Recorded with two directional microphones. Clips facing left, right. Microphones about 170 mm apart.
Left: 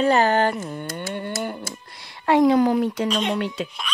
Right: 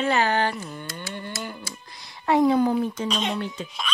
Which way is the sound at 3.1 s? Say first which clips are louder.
Left 4 dB; 70° left (ahead or behind).